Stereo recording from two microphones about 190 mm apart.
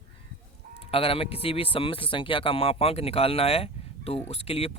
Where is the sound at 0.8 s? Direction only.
30° left (ahead or behind).